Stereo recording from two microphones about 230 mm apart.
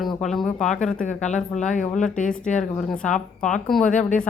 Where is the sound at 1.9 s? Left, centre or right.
Centre.